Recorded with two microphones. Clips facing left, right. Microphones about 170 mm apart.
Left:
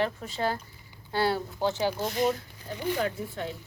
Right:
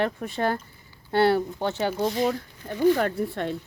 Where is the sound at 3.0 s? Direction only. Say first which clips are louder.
Right 5 dB; 65° right (ahead or behind).